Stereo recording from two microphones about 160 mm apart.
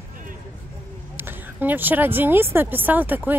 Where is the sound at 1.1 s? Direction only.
15° right (ahead or behind).